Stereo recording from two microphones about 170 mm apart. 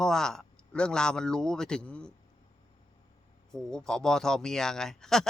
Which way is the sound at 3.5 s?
5° left (ahead or behind).